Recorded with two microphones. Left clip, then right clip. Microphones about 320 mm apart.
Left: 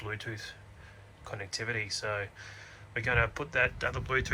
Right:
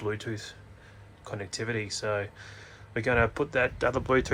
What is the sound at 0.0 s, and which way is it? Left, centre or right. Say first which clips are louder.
Speech: right 5 dB; centre.